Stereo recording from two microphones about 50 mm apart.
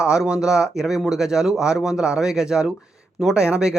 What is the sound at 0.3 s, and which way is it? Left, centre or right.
Speech, centre.